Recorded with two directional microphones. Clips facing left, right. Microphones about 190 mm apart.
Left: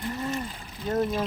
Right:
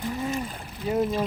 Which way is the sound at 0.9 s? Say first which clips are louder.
Right 1 dB; 5° right (ahead or behind).